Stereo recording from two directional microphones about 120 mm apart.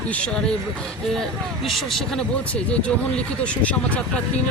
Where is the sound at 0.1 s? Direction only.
10° left (ahead or behind).